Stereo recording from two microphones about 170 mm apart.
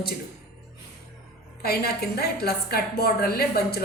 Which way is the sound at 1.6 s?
65° left (ahead or behind).